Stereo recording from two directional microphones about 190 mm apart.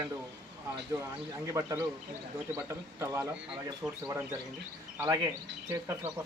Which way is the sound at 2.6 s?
15° right (ahead or behind).